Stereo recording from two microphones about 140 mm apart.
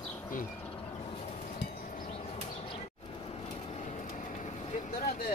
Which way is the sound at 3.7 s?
55° left (ahead or behind).